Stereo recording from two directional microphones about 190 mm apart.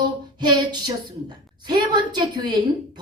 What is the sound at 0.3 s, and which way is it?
A woman's voice, 20° right (ahead or behind).